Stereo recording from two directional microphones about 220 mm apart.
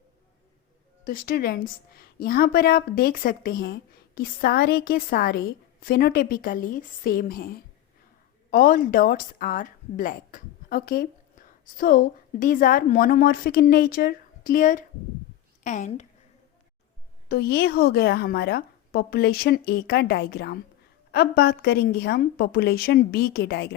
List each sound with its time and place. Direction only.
1.0 s a woman's voice: 40° left (ahead or behind)
17.2 s a woman's voice: 45° left (ahead or behind)